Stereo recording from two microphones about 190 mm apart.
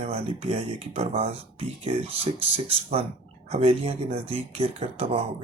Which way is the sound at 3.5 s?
30° right (ahead or behind).